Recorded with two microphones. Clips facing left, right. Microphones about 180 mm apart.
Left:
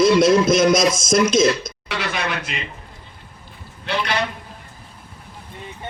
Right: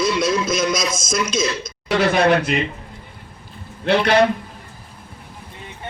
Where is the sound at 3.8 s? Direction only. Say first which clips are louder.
Right 8 dB; 55° right (ahead or behind).